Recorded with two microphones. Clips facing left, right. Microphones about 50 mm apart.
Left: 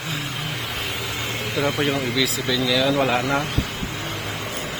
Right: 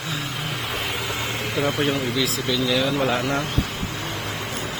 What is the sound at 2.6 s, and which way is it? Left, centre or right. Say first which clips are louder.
Speech: left 2 dB; left.